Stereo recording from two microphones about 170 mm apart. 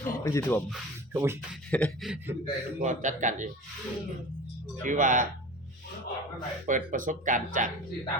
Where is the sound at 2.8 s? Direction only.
50° right (ahead or behind).